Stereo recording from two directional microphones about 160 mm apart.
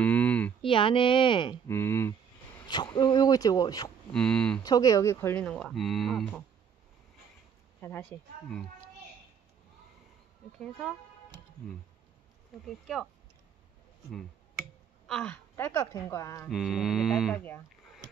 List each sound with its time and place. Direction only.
0.0 s a sound: 10° left (ahead or behind)
0.6 s a woman's voice: 30° left (ahead or behind)
1.7 s speech: 15° left (ahead or behind)
2.7 s speech: 25° left (ahead or behind)
4.1 s mantra: 5° left (ahead or behind)
4.6 s speech: 20° left (ahead or behind); by 6.4 s 5° left (ahead or behind)
8.0 s mantra: 5° left (ahead or behind)
10.6 s mantra: 5° right (ahead or behind)
12.6 s mantra: centre (ahead or behind)
15.0 s a woman's voice: 5° left (ahead or behind)
15.5 s speech: 15° left (ahead or behind)
16.4 s mantra: centre (ahead or behind)